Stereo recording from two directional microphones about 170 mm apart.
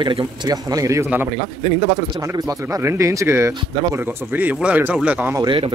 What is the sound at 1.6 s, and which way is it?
Speech, 30° right (ahead or behind).